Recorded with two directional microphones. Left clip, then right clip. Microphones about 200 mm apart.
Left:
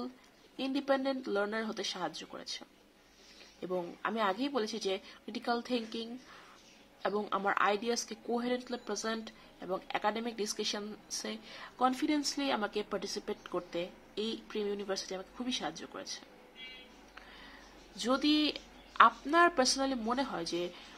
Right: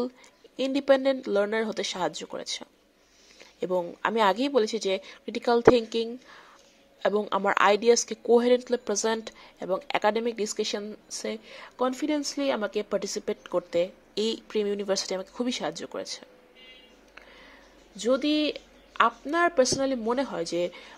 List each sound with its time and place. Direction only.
0.6 s speech: 35° right (ahead or behind)
17.9 s a woman's voice: 20° right (ahead or behind)